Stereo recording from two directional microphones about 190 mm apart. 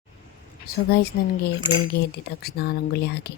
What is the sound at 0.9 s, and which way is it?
Speech, 55° left (ahead or behind).